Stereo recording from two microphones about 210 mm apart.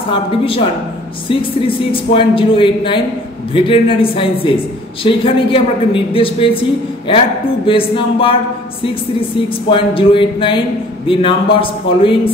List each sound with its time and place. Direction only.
0.1 s speech: 25° left (ahead or behind)
7.6 s speech: 25° left (ahead or behind)
9.7 s speech: 25° left (ahead or behind)